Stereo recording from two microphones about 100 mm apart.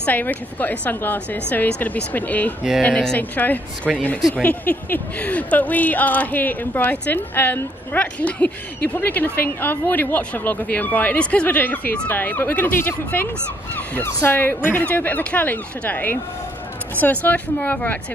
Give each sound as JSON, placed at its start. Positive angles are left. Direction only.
{"t": 0.0, "sound": "speech", "side_deg": 15}